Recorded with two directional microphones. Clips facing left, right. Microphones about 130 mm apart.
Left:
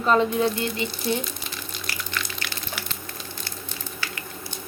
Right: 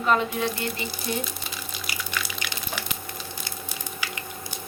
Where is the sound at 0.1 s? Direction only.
35° left (ahead or behind).